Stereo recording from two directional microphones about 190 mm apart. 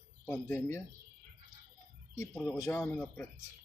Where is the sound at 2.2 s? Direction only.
15° left (ahead or behind).